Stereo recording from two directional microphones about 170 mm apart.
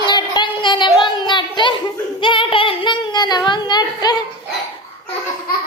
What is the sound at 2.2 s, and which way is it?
Speech, 30° left (ahead or behind).